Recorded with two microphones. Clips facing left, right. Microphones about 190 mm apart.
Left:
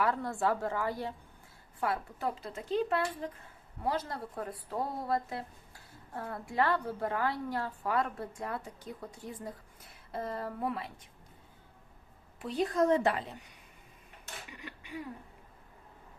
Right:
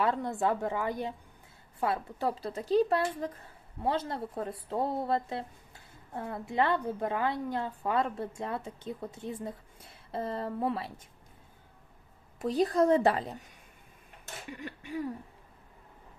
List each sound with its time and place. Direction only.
0.0 s speech: 20° right (ahead or behind)
12.4 s speech: 40° right (ahead or behind)
14.5 s a sound: 45° right (ahead or behind)